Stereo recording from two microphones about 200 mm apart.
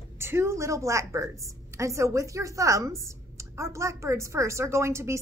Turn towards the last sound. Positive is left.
turn(degrees=-15)  # may be behind; listen again after turning